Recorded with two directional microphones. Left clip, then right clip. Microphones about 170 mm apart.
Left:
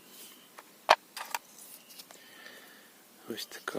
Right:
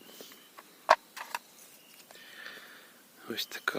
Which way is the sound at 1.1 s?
25° left (ahead or behind).